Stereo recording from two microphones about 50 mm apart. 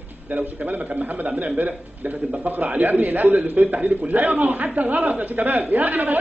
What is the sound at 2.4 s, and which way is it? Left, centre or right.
A man's voice, right.